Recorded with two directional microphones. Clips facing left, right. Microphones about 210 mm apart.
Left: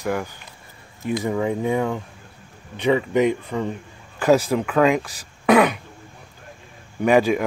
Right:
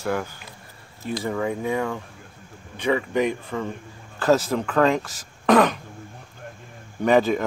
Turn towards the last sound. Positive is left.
turn(degrees=10)  # may be behind; listen again after turning